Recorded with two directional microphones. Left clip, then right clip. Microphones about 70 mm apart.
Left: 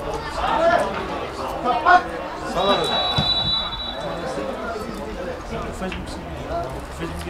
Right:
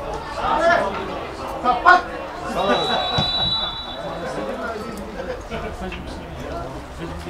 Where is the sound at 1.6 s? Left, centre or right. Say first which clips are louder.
Right 2 dB; right.